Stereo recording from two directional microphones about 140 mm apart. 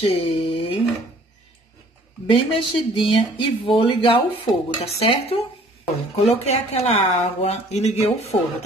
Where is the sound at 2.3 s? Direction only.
40° left (ahead or behind).